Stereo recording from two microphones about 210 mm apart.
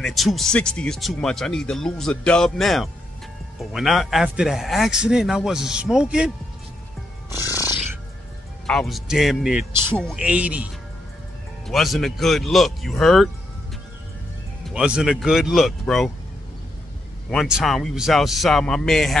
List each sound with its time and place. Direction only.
0.0 s speech: centre (ahead or behind)
7.2 s music: 15° left (ahead or behind)
8.6 s speech: centre (ahead or behind)
14.7 s speech: 5° right (ahead or behind)
17.3 s speech: centre (ahead or behind)